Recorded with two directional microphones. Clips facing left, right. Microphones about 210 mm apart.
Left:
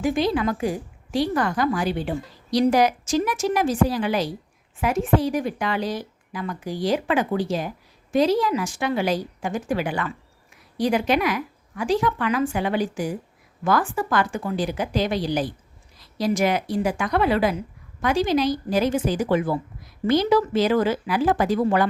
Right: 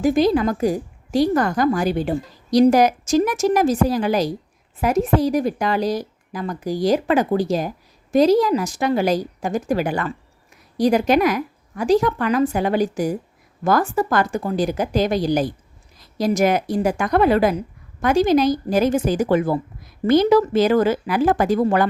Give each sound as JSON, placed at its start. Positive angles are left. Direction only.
{"t": 0.0, "sound": "a woman's voice", "side_deg": -40}